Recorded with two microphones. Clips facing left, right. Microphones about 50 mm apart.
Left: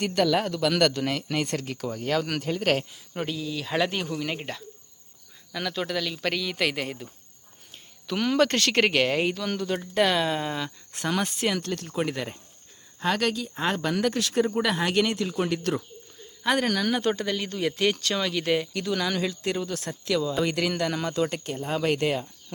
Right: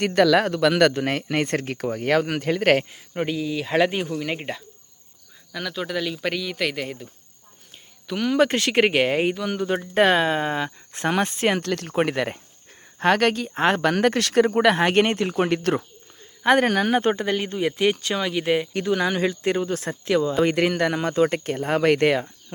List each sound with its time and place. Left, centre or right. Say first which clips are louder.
0.0 s speech: right 6 dB; right
3.2 s speech: right 5 dB; right
5.5 s speech: right 1 dB; centre
8.4 s speech: right 4 dB; centre
9.9 s speech: right 5 dB; right
11.6 s speech: right 5 dB; right
11.9 s speech: right 8 dB; right